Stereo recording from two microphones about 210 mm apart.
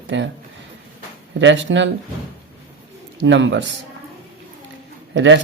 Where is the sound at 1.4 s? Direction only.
60° right (ahead or behind).